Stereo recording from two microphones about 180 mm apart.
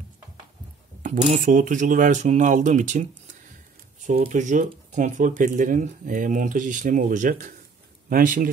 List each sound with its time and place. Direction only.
1.0 s speech: 45° right (ahead or behind)